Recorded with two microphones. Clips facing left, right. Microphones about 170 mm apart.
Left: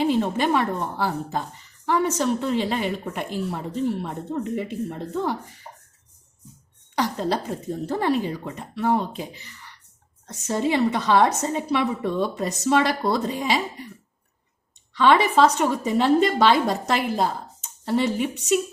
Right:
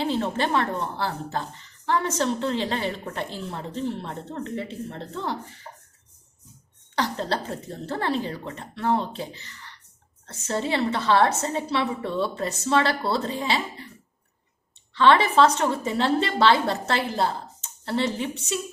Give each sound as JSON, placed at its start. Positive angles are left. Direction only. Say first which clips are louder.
{"t": 0.0, "sound": "a woman's voice", "louder": "left 4 dB", "side_deg": 10}
{"t": 6.9, "sound": "a woman's voice", "louder": "left 3 dB", "side_deg": 10}
{"t": 14.9, "sound": "a woman's voice", "louder": "even", "side_deg": 15}